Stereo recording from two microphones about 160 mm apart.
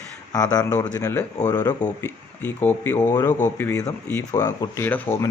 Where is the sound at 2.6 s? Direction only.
10° left (ahead or behind).